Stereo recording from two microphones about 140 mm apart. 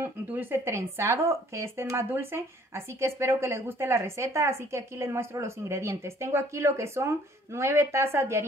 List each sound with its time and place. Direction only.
0.0 s speech: 15° right (ahead or behind)